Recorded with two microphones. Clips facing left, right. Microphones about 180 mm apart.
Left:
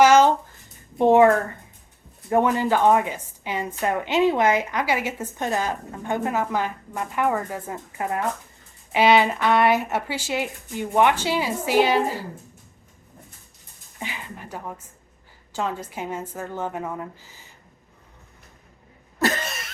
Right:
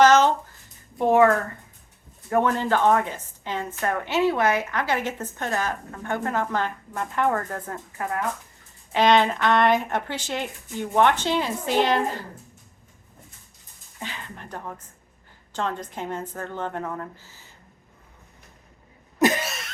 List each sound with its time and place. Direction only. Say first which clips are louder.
0.0 s a sound: left 2 dB; 10° left (ahead or behind)
0.9 s speech: left 3 dB; 25° left (ahead or behind)
2.3 s a woman's voice: left 2 dB; 10° left (ahead or behind)
8.0 s speech: left 2 dB; 20° left (ahead or behind)
8.9 s a woman's voice: left 1 dB; 10° left (ahead or behind)
14.0 s a woman's voice: left 2 dB; 10° left (ahead or behind)
19.2 s cough: right 3 dB; 15° right (ahead or behind)
19.5 s a sound: even; centre (ahead or behind)